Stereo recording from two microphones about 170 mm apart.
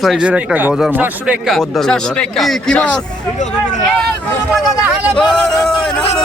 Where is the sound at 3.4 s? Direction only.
45° left (ahead or behind).